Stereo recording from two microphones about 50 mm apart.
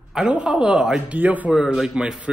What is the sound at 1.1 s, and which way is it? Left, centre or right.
Speech, right.